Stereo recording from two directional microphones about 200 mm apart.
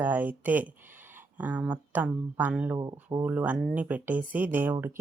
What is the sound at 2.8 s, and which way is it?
Speech, 20° right (ahead or behind).